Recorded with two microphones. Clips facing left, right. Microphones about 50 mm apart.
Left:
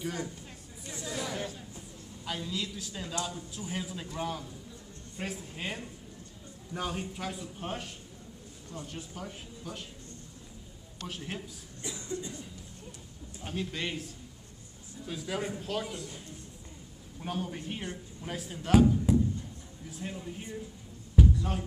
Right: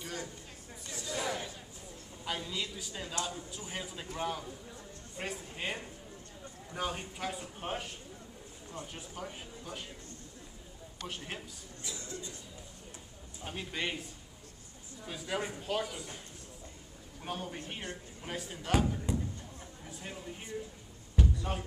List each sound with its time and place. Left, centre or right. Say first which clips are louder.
0.0 s a man's voice: left 5 dB; centre
1.1 s chatter: right 1 dB; centre
2.2 s a woman's voice: left 1 dB; centre
11.1 s a man's voice: left 3 dB; centre
11.8 s cough: left 6 dB; left
13.5 s speech: left 2 dB; centre
15.0 s a man's voice: left 2 dB; centre
17.2 s a man's voice: left 4 dB; centre
19.1 s a sound: left 9 dB; centre
19.9 s a man's voice: left 5 dB; centre
21.2 s a sound: left 6 dB; centre